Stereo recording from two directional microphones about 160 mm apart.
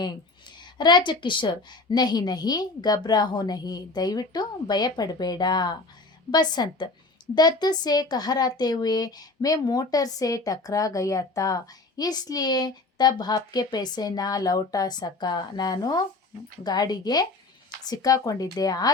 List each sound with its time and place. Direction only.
0.6 s speech: 25° left (ahead or behind)